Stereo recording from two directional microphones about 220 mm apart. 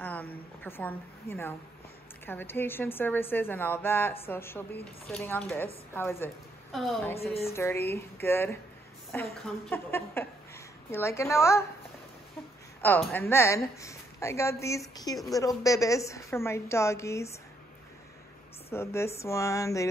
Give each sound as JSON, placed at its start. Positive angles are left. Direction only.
{"t": 0.0, "sound": "a sound", "side_deg": 10}
{"t": 2.2, "sound": "a woman's voice", "side_deg": 10}
{"t": 7.4, "sound": "a woman's voice", "side_deg": 10}
{"t": 12.8, "sound": "a woman's voice", "side_deg": 10}
{"t": 18.7, "sound": "a woman's voice", "side_deg": 10}